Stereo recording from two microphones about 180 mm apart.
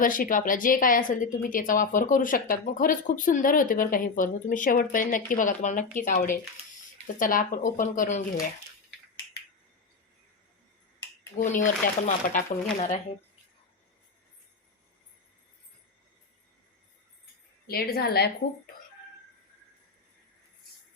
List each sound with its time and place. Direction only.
0.0 s a woman's voice: 50° left (ahead or behind)
11.3 s a woman's voice: 45° left (ahead or behind)
17.7 s a woman's voice: 60° left (ahead or behind)